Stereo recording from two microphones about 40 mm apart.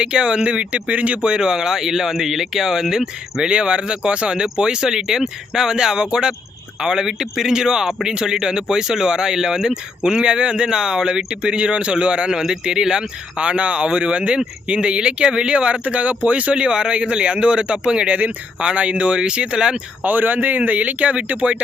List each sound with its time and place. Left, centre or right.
0.0 s speech: right
4.4 s speech: centre
12.3 s speech: centre
20.1 s speech: right
20.6 s speech: right